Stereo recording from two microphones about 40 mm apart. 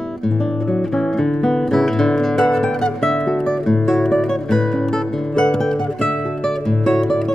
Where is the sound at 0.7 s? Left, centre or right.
Centre.